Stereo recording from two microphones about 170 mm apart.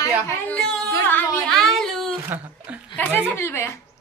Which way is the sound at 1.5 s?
Centre (ahead or behind).